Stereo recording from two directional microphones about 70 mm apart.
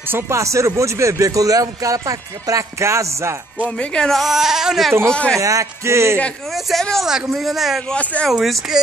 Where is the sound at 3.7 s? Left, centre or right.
Centre.